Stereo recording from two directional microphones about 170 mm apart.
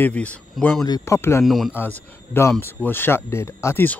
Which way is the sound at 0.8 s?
20° left (ahead or behind).